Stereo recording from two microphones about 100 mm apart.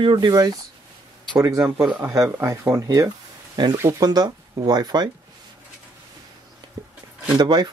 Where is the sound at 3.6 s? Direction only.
45° right (ahead or behind).